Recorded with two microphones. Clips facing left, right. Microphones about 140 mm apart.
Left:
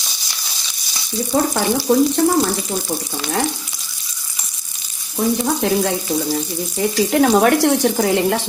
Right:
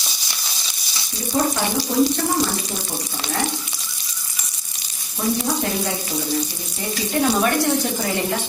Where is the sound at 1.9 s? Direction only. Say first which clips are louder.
Left 5 dB; 75° left (ahead or behind).